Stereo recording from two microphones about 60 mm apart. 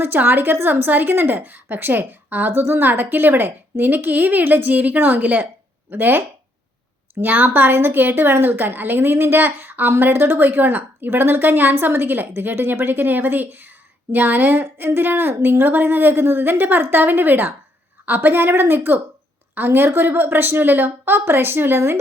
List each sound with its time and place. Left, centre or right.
0.0 s a woman's voice: right